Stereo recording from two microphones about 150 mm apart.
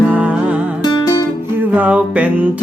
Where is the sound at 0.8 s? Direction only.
25° left (ahead or behind).